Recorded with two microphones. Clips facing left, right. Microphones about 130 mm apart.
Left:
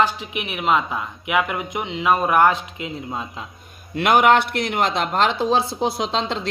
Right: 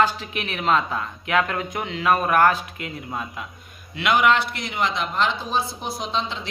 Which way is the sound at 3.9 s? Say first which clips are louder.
Left 4 dB; 50° left (ahead or behind).